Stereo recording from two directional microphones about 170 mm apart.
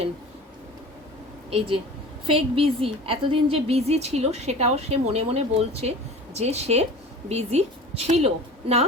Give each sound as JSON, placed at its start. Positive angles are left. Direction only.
{"t": 1.5, "sound": "a woman's voice", "side_deg": -35}